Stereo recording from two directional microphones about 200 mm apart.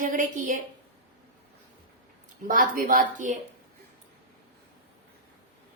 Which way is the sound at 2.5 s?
45° right (ahead or behind).